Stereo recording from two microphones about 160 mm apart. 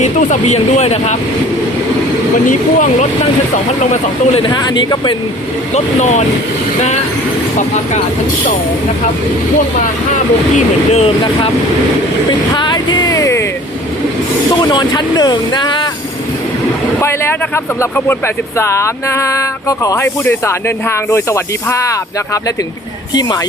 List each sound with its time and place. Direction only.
0.0 s speech: 45° left (ahead or behind)
2.5 s speech: 50° left (ahead or behind)
4.4 s speech: 25° left (ahead or behind)
5.7 s speech: 45° left (ahead or behind)
10.9 s speech: 40° left (ahead or behind)
12.5 s a sound: 30° left (ahead or behind)
14.6 s speech: 25° left (ahead or behind)
17.0 s speech: 15° left (ahead or behind)